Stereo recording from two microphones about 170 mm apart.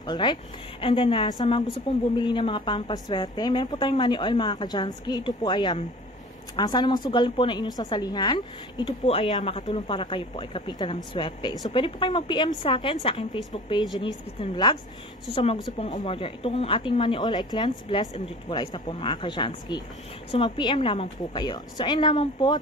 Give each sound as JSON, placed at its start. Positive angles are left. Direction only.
{"t": 0.0, "sound": "a woman's voice", "side_deg": 25}
{"t": 9.0, "sound": "a woman's voice", "side_deg": 35}